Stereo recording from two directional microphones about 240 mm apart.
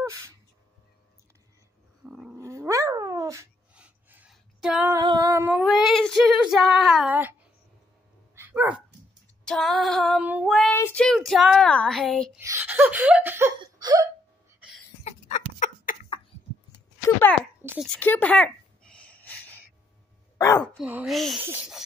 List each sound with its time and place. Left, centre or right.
2.0 s cat: centre
4.9 s female singing: centre
8.4 s dog: centre
9.4 s child singing: centre
10.8 s speech: centre
12.4 s laughter: centre
13.6 s a sound: centre
15.0 s chicken: left
17.6 s a child's voice: centre
17.8 s a sound: centre
20.3 s speech: centre
20.7 s speech: centre